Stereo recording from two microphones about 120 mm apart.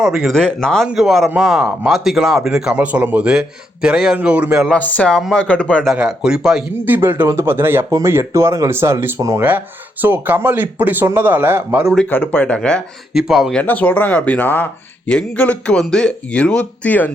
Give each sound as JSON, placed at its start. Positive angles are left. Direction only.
{"t": 0.0, "sound": "speech", "side_deg": -5}
{"t": 4.8, "sound": "speech", "side_deg": 10}
{"t": 5.9, "sound": "speech", "side_deg": -5}
{"t": 6.8, "sound": "speech", "side_deg": -15}
{"t": 12.0, "sound": "speech", "side_deg": 15}
{"t": 13.1, "sound": "speech", "side_deg": -5}
{"t": 13.6, "sound": "speech", "side_deg": 15}